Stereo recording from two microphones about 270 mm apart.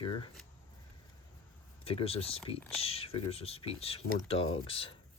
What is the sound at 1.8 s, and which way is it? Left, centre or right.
Speech, left.